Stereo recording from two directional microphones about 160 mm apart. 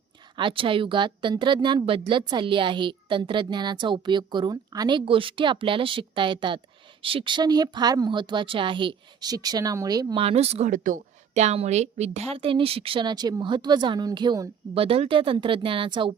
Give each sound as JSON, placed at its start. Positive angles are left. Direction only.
{"t": 0.3, "sound": "a woman's voice", "side_deg": -30}
{"t": 10.2, "sound": "a woman's voice", "side_deg": -40}
{"t": 10.7, "sound": "a woman's voice", "side_deg": -55}
{"t": 14.8, "sound": "a woman's voice", "side_deg": -35}